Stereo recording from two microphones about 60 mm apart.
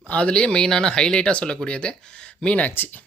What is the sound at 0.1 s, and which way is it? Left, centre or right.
Speech, centre.